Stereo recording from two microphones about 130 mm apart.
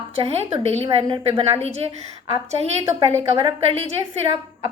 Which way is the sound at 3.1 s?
50° right (ahead or behind).